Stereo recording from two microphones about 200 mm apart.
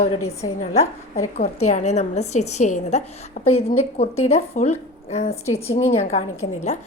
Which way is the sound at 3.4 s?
90° left.